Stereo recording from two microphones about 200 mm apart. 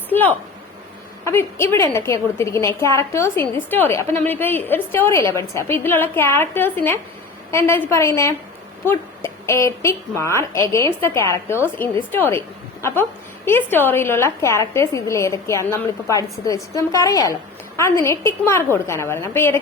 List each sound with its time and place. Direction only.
0.1 s a woman's voice: 10° left (ahead or behind)